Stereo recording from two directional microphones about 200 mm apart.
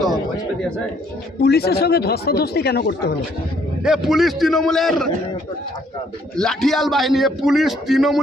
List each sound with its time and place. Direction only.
1.4 s speech: 50° left (ahead or behind)
3.8 s a man's voice: centre (ahead or behind)
6.3 s a man's voice: 5° left (ahead or behind)